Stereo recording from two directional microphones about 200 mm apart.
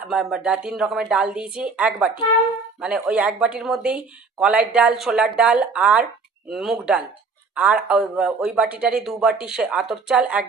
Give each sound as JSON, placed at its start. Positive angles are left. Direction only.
{"t": 0.1, "sound": "speech", "side_deg": 0}